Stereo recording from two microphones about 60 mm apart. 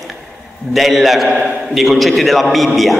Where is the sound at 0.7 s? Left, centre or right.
Centre.